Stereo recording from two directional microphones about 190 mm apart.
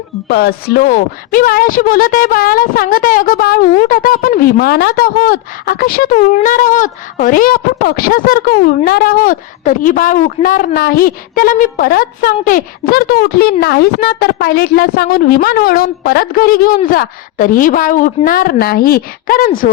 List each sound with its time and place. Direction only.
0.3 s a woman's voice: 55° left (ahead or behind)